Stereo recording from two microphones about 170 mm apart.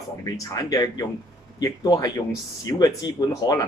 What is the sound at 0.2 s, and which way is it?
Speech, 20° left (ahead or behind).